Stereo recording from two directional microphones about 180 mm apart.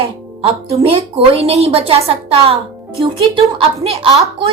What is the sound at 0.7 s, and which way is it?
A woman's voice, 35° right (ahead or behind).